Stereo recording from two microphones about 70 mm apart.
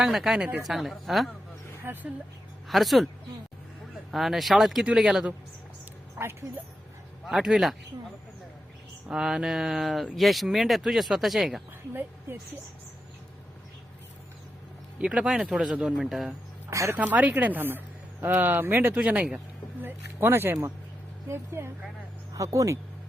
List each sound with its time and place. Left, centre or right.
0.0 s speech: centre
1.8 s speech: right
2.6 s a woman's voice: centre
4.1 s speech: centre
7.3 s speech: centre
9.0 s speech: centre
14.9 s speech: centre
16.6 s speech: right
17.0 s speech: right
18.9 s speech: centre
20.1 s speech: right
22.3 s speech: right